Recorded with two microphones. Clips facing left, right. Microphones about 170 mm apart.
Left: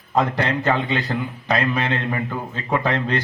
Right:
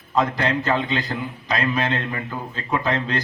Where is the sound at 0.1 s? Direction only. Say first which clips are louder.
Left 1 dB; 60° left (ahead or behind).